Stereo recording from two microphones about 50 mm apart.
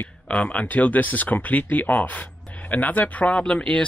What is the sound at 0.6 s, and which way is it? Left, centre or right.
Speech, left.